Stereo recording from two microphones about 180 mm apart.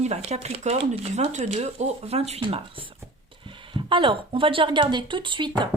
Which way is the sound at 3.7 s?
25° right (ahead or behind).